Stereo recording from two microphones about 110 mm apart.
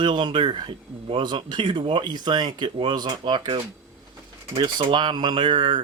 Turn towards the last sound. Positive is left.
turn(degrees=-50)  # may be behind; listen again after turning